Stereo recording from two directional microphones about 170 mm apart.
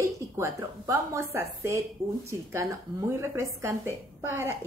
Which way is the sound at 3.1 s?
15° right (ahead or behind).